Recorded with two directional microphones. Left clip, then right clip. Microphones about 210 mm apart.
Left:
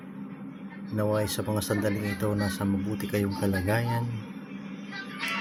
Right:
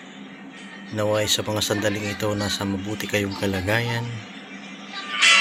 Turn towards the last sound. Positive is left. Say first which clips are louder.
# right 16 dB
turn(degrees=-35)  # may be behind; listen again after turning